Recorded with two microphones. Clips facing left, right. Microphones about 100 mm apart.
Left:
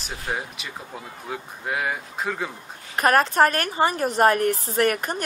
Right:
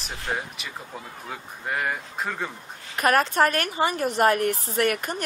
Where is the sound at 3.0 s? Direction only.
40° left (ahead or behind).